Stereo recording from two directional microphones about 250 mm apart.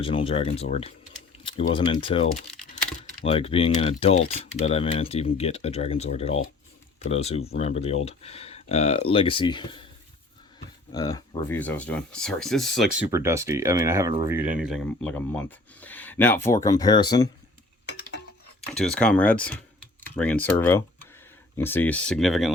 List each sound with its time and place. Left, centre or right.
0.0 s speech: left
10.9 s speech: centre
13.0 s speech: centre
18.7 s speech: centre